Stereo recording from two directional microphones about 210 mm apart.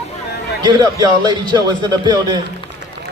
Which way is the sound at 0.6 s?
20° right (ahead or behind).